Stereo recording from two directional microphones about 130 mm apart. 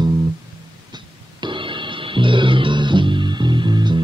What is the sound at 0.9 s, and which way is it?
Music, 35° right (ahead or behind).